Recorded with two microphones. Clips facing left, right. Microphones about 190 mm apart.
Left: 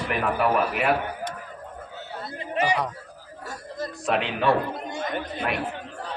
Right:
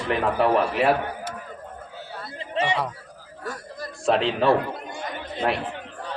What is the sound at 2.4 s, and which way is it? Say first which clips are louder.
Chatter: even; 25° right (ahead or behind).